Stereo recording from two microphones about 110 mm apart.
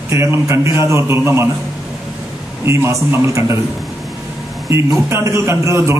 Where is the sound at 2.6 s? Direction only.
25° right (ahead or behind).